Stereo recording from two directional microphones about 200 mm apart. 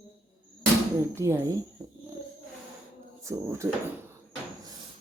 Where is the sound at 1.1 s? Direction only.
10° right (ahead or behind).